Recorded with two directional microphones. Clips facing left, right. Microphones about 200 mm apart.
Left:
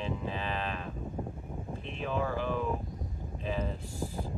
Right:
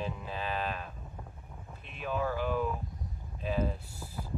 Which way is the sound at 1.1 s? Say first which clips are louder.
Left 11 dB; 35° left (ahead or behind).